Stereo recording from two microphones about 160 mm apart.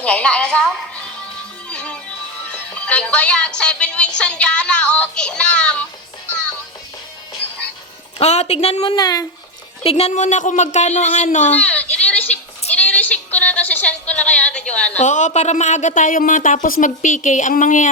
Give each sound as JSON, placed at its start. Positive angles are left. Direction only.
{"t": 0.0, "sound": "a sound", "side_deg": 5}
{"t": 1.7, "sound": "music", "side_deg": 5}
{"t": 2.5, "sound": "a woman's voice", "side_deg": 5}
{"t": 8.2, "sound": "speech", "side_deg": 45}
{"t": 9.0, "sound": "speech", "side_deg": 25}
{"t": 9.8, "sound": "speech", "side_deg": 40}
{"t": 11.5, "sound": "a sound", "side_deg": 10}
{"t": 14.9, "sound": "speech", "side_deg": 50}